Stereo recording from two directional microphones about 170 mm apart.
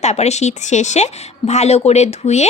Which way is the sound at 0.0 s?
40° left (ahead or behind).